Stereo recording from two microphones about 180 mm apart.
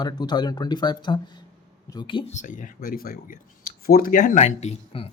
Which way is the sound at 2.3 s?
45° left (ahead or behind).